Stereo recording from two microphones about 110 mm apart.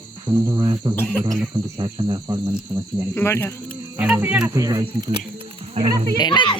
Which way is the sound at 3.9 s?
15° right (ahead or behind).